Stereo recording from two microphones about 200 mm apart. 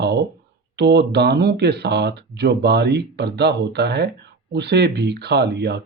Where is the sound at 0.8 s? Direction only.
55° right (ahead or behind).